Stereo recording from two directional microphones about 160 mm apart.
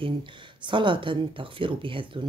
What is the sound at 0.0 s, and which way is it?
Speech, 30° right (ahead or behind).